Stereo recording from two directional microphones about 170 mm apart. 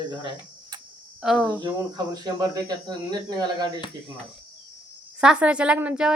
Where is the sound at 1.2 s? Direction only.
Centre (ahead or behind).